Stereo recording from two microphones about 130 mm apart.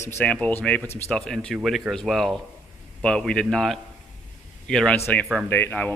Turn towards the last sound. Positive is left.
turn(degrees=15)  # may be behind; listen again after turning